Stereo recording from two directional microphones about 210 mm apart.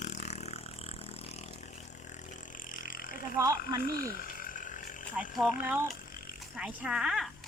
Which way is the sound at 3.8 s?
45° left (ahead or behind).